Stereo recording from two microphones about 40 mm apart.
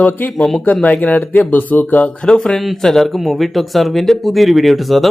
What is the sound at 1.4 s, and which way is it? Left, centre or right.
Speech, left.